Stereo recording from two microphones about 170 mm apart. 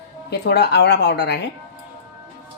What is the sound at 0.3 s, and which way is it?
Speech, 75° left (ahead or behind).